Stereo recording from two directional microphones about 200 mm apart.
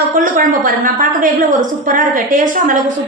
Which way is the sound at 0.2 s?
45° right (ahead or behind).